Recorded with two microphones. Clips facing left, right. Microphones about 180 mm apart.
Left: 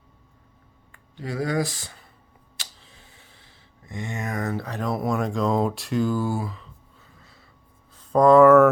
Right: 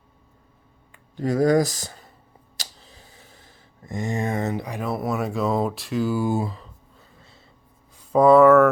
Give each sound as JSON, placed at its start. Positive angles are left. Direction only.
{"t": 1.1, "sound": "speech", "side_deg": -45}
{"t": 2.6, "sound": "a sound", "side_deg": -35}
{"t": 4.9, "sound": "speech", "side_deg": 0}
{"t": 6.2, "sound": "speech", "side_deg": -25}
{"t": 8.1, "sound": "speech", "side_deg": -5}